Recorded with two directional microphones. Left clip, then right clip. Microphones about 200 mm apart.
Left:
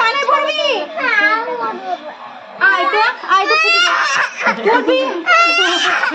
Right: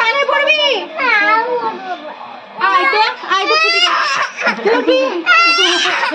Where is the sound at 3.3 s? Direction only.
10° right (ahead or behind).